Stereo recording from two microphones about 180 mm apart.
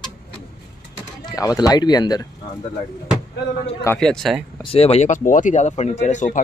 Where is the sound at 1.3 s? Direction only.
20° left (ahead or behind).